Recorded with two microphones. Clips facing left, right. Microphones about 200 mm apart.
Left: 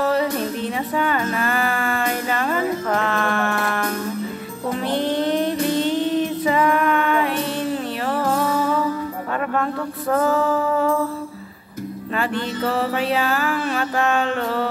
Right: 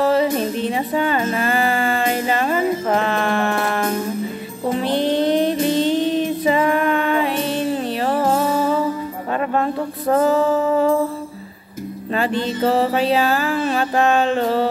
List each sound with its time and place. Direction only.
0.0 s music: 25° right (ahead or behind)
12.1 s music: 25° right (ahead or behind)